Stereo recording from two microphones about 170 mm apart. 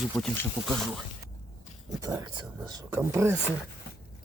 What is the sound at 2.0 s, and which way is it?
Speech, 20° right (ahead or behind).